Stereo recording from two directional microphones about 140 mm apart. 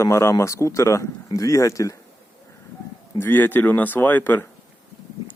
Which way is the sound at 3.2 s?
15° left (ahead or behind).